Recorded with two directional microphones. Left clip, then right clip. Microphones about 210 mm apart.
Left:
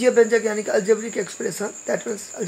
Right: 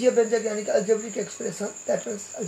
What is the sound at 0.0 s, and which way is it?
Speech, 50° left (ahead or behind).